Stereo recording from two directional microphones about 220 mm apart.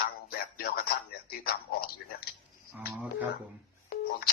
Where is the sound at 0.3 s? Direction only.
45° left (ahead or behind).